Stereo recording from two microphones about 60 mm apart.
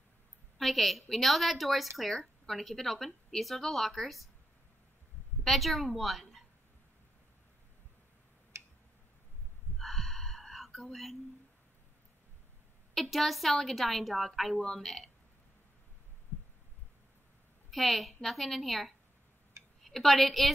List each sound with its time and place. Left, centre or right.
0.6 s a woman's voice: centre
5.4 s a woman's voice: centre
8.5 s tick-tock: right
9.8 s whispering: centre
12.9 s a woman's voice: centre
17.6 s a woman's voice: centre